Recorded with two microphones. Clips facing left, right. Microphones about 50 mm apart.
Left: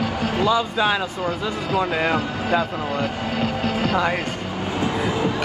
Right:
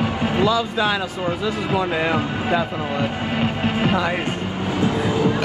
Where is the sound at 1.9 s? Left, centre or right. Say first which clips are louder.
Right 1 dB; centre.